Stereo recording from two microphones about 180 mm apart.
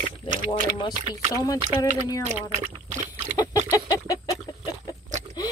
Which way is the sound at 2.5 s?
40° right (ahead or behind).